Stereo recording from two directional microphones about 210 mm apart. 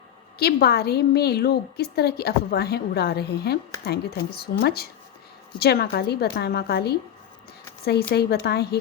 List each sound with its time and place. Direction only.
0.3 s a woman's voice: 50° left (ahead or behind)